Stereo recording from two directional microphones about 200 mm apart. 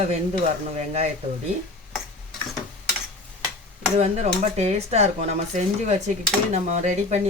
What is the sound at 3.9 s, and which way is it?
Speech, 35° right (ahead or behind).